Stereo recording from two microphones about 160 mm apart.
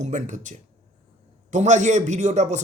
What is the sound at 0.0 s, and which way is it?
A man's voice, 50° right (ahead or behind).